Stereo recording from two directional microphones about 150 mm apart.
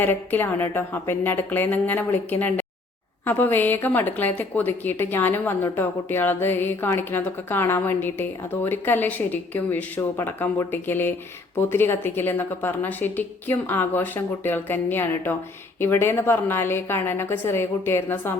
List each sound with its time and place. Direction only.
0.0 s a woman's voice: 15° left (ahead or behind)